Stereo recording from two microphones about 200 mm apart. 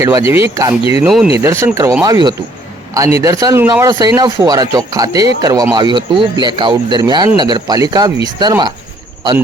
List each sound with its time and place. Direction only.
0.0 s speech: 15° right (ahead or behind)
1.0 s speech: centre (ahead or behind)
1.4 s speech: 15° right (ahead or behind)